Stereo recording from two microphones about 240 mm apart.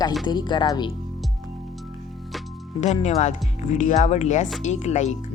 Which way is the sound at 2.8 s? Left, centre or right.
Left.